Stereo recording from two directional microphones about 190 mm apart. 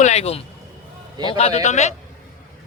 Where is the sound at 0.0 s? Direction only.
35° left (ahead or behind).